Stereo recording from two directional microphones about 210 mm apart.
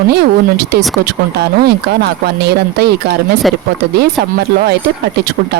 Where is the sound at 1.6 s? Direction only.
50° right (ahead or behind).